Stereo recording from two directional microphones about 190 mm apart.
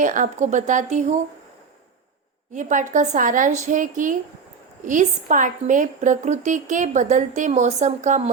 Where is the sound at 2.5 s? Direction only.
40° right (ahead or behind).